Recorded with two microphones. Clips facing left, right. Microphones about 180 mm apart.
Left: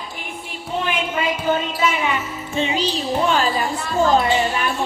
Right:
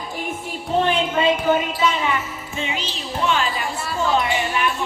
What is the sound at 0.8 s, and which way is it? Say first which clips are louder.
Speech: right 4 dB; 30° right (ahead or behind).